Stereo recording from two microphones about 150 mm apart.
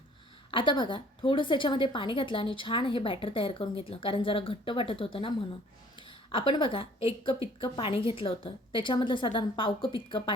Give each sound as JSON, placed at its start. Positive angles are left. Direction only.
{"t": 0.5, "sound": "a woman's voice", "side_deg": 30}